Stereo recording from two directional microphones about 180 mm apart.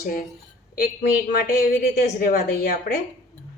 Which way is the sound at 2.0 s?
50° left (ahead or behind).